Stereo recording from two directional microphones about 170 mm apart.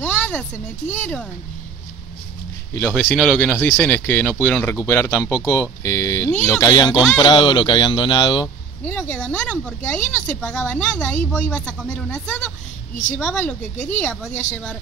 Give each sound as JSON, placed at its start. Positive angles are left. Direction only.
{"t": 0.0, "sound": "a sound", "side_deg": 10}
{"t": 0.9, "sound": "speech", "side_deg": 10}
{"t": 2.7, "sound": "speech", "side_deg": 10}
{"t": 8.8, "sound": "speech", "side_deg": 10}
{"t": 12.9, "sound": "speech", "side_deg": 45}
{"t": 13.2, "sound": "speech", "side_deg": 5}